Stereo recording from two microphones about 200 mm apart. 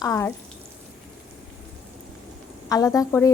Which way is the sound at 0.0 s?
15° left (ahead or behind).